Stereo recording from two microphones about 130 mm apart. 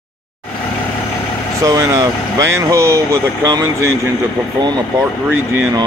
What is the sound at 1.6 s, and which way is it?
Speech, 25° right (ahead or behind).